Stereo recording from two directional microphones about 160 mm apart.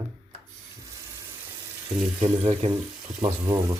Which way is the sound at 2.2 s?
40° right (ahead or behind).